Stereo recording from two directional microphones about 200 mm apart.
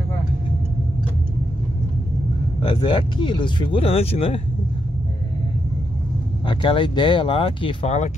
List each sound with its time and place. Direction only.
2.6 s speech: 25° left (ahead or behind)
6.4 s speech: 25° left (ahead or behind)